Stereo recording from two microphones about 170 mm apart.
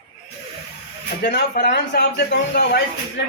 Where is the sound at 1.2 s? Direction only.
80° left.